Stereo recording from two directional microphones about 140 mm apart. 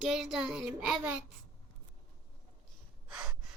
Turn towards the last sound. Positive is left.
turn(degrees=-5)  # may be behind; listen again after turning